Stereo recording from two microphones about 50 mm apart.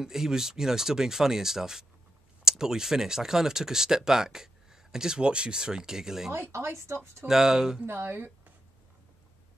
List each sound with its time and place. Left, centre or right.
0.0 s speech: centre
6.5 s speech: right
7.2 s speech: centre
7.8 s speech: right